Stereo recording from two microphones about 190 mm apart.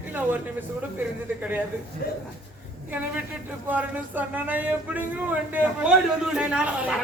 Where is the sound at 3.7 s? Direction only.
10° right (ahead or behind).